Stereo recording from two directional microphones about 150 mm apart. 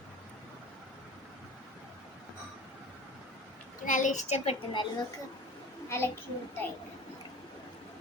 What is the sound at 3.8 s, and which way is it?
A child's voice, 60° left (ahead or behind).